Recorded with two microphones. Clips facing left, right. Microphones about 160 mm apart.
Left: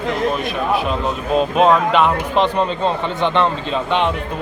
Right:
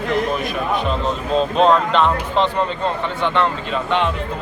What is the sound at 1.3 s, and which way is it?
Speech, 10° left (ahead or behind).